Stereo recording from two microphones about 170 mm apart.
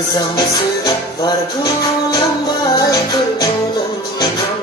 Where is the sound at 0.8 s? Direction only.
20° left (ahead or behind).